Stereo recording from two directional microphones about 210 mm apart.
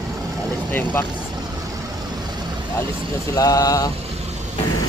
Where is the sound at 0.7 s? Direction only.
10° left (ahead or behind).